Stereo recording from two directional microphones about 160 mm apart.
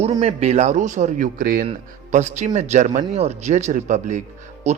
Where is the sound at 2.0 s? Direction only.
45° right (ahead or behind).